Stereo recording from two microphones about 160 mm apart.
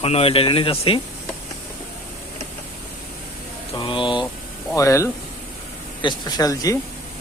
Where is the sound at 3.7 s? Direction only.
30° left (ahead or behind).